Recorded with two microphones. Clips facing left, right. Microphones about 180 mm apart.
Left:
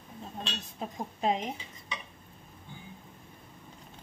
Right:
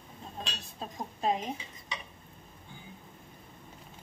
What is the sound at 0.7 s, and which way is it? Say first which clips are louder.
Speech: left 1 dB; 20° left (ahead or behind).